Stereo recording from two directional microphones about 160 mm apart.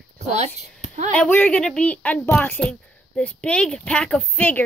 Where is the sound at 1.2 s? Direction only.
10° left (ahead or behind).